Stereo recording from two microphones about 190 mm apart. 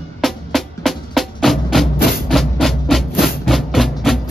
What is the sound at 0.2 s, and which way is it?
Music, centre (ahead or behind).